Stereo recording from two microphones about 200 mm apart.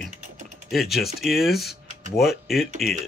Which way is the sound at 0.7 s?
Centre (ahead or behind).